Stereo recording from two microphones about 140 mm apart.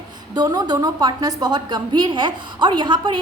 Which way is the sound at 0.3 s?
30° right (ahead or behind).